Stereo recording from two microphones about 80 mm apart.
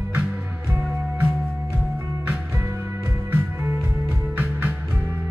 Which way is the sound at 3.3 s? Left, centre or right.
Right.